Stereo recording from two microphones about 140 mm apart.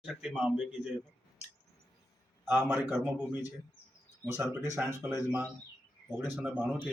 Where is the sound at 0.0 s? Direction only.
5° right (ahead or behind).